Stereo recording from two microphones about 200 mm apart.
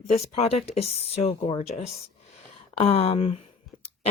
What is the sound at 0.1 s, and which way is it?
Speech, 30° left (ahead or behind).